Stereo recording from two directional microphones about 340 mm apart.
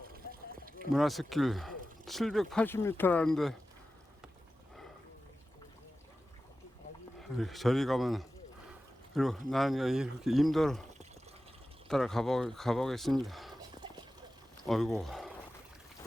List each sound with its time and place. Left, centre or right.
0.1 s a sound: right
0.9 s speech: centre
7.2 s speech: centre
11.9 s speech: centre
14.7 s speech: centre